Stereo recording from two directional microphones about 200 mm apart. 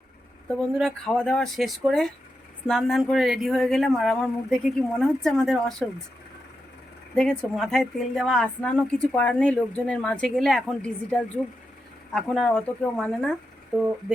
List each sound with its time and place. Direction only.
0.4 s a woman's voice: centre (ahead or behind)
7.2 s a woman's voice: centre (ahead or behind)